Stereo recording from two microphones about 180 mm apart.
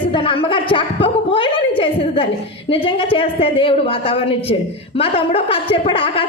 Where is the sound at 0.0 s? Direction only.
30° left (ahead or behind).